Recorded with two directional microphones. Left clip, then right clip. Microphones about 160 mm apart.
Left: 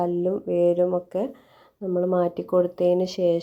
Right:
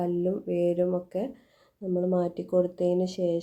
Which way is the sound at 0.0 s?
10° left (ahead or behind).